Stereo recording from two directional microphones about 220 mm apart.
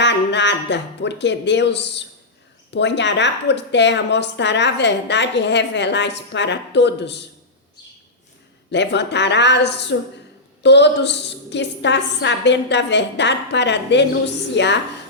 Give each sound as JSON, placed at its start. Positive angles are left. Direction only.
{"t": 0.0, "sound": "a woman's voice", "side_deg": 50}
{"t": 8.7, "sound": "a woman's voice", "side_deg": 55}